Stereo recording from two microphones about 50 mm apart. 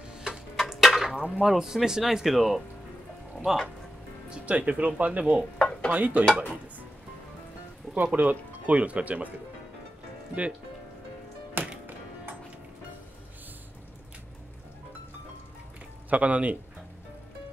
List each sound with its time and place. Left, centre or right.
0.1 s tick-tock: centre
0.6 s a sound: centre
1.4 s speech: centre
4.3 s speech: right
5.6 s stir: centre
5.9 s speech: right
7.9 s speech: right
11.6 s music: right
16.1 s speech: right